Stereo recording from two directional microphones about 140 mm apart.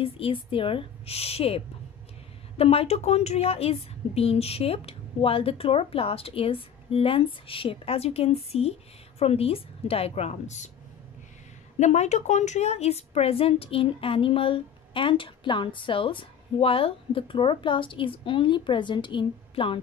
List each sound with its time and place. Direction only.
0.0 s a woman's voice: 40° left (ahead or behind); by 10.7 s 55° left (ahead or behind)
11.8 s a woman's voice: 55° left (ahead or behind); by 19.8 s 40° left (ahead or behind)